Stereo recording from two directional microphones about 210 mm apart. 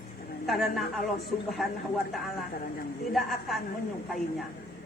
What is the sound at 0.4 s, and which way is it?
A man's voice, centre (ahead or behind).